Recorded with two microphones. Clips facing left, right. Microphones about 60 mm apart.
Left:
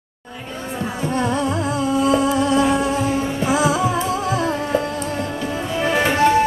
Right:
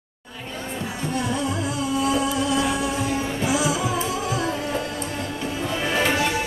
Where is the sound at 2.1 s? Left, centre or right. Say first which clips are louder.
Left 6 dB; left.